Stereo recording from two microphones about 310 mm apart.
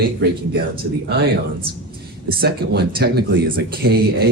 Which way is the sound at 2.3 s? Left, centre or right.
Right.